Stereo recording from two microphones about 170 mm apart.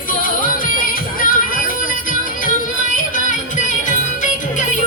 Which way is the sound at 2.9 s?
50° left (ahead or behind).